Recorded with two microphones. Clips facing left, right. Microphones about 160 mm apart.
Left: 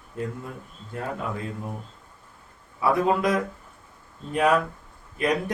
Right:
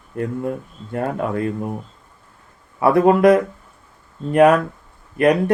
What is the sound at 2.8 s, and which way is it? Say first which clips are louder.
Speech: right 9 dB; 65° right (ahead or behind).